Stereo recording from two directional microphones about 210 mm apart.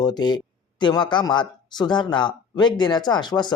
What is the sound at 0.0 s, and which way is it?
Speech, 20° left (ahead or behind).